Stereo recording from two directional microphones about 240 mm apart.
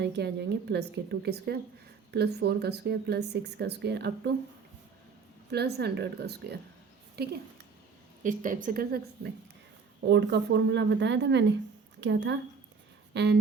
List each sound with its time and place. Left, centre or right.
0.0 s speech: right
5.5 s a woman's voice: right